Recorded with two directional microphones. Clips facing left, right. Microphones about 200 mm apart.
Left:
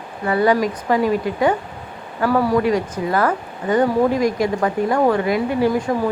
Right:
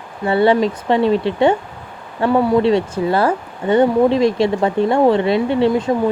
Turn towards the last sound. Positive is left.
turn(degrees=-20)  # may be behind; listen again after turning